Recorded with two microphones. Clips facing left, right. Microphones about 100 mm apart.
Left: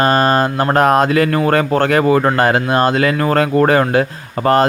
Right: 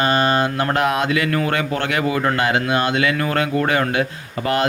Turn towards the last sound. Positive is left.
turn(degrees=40)  # may be behind; listen again after turning